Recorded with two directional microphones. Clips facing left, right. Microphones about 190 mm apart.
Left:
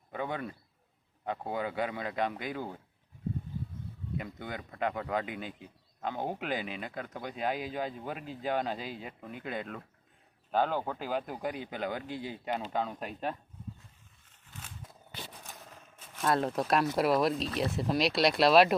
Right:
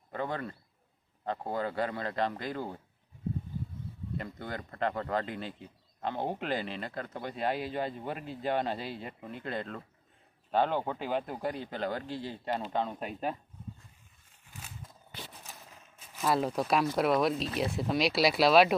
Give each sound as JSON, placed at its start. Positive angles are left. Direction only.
{"t": 0.1, "sound": "a man's voice", "side_deg": 10}
{"t": 4.2, "sound": "speech", "side_deg": 5}
{"t": 14.5, "sound": "a sound", "side_deg": -10}
{"t": 16.1, "sound": "speech", "side_deg": 0}